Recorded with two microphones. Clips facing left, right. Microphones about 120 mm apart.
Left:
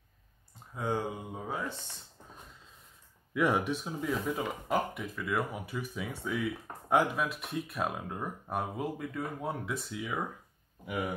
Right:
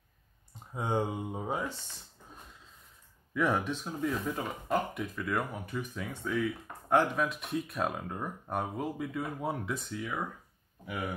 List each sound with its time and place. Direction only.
0.7 s speech: 20° right (ahead or behind)
3.3 s speech: 10° left (ahead or behind)